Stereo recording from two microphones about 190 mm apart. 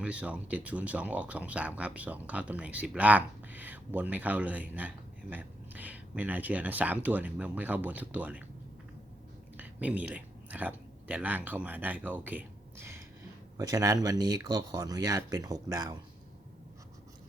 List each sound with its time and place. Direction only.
0.0 s speech: 5° right (ahead or behind)
9.6 s speech: 10° right (ahead or behind)